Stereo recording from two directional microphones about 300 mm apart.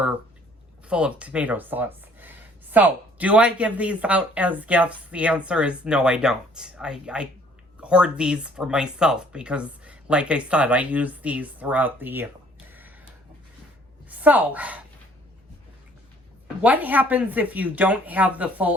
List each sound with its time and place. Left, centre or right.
0.9 s speech: centre
14.1 s speech: centre
16.6 s speech: centre